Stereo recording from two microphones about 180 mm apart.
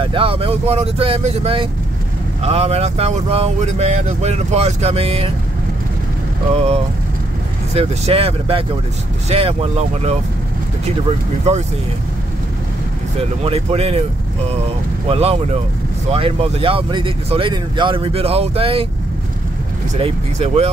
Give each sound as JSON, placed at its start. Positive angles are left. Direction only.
{"t": 0.0, "sound": "speech", "side_deg": -30}
{"t": 6.5, "sound": "speech", "side_deg": -35}
{"t": 13.4, "sound": "speech", "side_deg": -35}
{"t": 15.0, "sound": "speech", "side_deg": -35}
{"t": 20.0, "sound": "speech", "side_deg": -35}